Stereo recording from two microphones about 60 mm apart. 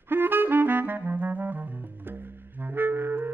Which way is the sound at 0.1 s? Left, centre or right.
Right.